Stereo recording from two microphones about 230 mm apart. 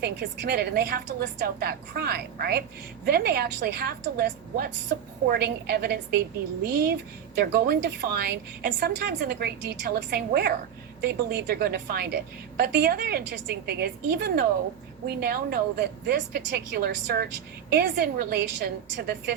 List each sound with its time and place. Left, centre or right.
0.0 s a woman's voice: right